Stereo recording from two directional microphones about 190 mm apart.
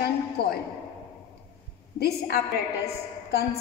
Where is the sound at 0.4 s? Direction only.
60° left (ahead or behind).